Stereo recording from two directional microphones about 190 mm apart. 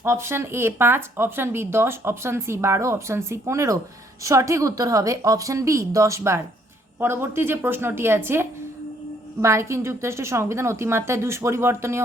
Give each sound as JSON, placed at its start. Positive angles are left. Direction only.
{"t": 0.0, "sound": "speech", "side_deg": -15}